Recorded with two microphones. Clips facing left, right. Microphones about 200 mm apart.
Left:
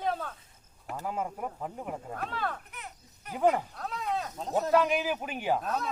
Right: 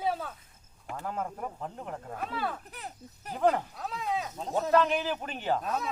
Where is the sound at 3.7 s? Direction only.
5° right (ahead or behind).